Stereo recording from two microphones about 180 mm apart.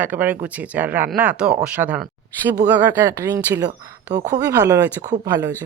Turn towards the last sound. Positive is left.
turn(degrees=-20)  # may be behind; listen again after turning